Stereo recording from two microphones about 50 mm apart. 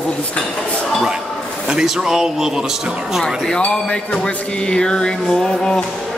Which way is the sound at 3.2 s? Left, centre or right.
Centre.